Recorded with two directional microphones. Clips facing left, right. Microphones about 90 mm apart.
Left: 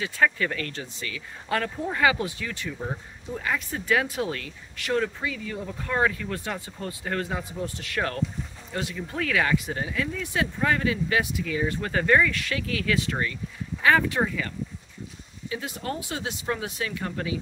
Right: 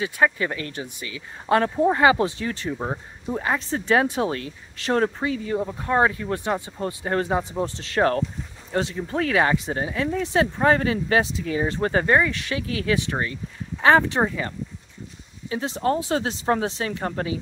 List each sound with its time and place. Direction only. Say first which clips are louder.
0.0 s speech: right 2 dB; 20° right (ahead or behind)
1.6 s speech: right 5 dB; 35° right (ahead or behind)
15.5 s speech: right 8 dB; 30° right (ahead or behind)